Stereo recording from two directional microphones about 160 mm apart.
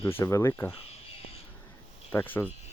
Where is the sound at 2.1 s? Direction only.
10° left (ahead or behind).